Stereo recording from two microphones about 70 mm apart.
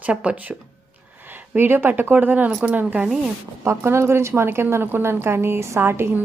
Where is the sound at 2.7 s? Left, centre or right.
Right.